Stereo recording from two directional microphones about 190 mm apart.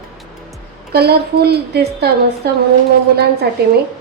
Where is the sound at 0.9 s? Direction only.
55° right (ahead or behind).